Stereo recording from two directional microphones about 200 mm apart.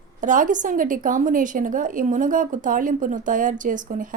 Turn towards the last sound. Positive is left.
turn(degrees=-40)  # may be behind; listen again after turning